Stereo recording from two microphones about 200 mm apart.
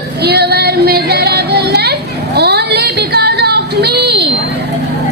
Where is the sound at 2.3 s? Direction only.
55° right (ahead or behind).